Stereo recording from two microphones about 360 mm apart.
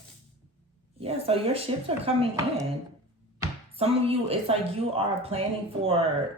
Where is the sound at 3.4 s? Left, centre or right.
Centre.